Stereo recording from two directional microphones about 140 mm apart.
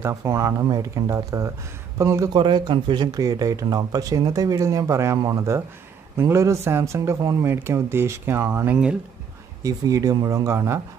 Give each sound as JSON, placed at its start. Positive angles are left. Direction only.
{"t": 0.0, "sound": "speech", "side_deg": -20}
{"t": 2.3, "sound": "speech", "side_deg": -35}
{"t": 9.6, "sound": "speech", "side_deg": -25}